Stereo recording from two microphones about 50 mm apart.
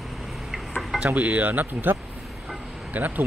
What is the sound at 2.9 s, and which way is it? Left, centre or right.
Speech, right.